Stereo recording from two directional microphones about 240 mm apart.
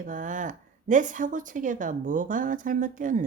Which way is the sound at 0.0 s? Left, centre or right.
Right.